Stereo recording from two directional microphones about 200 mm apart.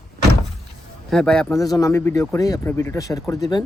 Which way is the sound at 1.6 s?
15° left (ahead or behind).